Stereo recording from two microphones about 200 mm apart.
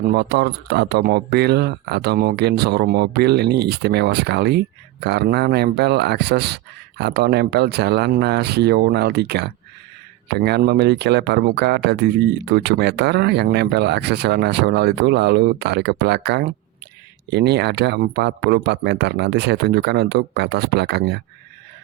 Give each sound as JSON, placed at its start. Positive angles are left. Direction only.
{"t": 0.1, "sound": "speech", "side_deg": -55}